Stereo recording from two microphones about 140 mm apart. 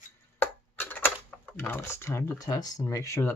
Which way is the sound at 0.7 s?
15° left (ahead or behind).